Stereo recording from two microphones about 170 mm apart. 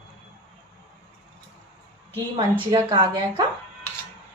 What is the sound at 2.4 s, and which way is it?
Speech, 25° right (ahead or behind).